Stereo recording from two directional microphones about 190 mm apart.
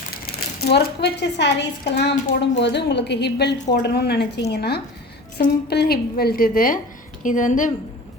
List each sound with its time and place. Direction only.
0.3 s a woman's voice: 55° left (ahead or behind)